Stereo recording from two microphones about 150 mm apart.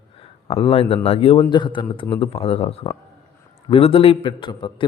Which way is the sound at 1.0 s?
40° left (ahead or behind).